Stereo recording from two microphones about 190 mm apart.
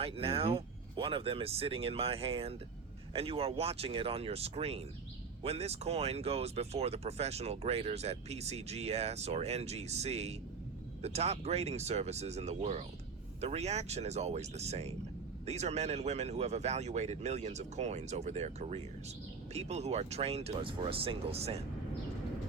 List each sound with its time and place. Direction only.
0.0 s speech: 30° right (ahead or behind)